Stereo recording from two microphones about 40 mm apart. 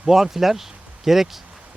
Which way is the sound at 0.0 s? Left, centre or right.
Centre.